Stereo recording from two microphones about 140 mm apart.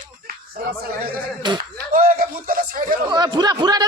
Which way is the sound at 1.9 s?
85° right.